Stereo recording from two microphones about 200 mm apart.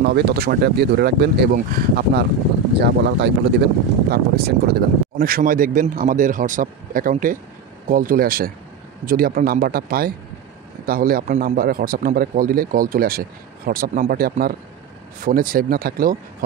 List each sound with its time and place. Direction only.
0.0 s speech: 50° right (ahead or behind)